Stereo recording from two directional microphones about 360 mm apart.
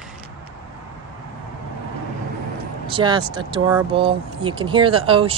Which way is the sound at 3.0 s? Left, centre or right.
Centre.